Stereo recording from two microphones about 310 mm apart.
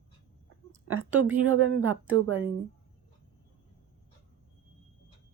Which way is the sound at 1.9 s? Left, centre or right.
Centre.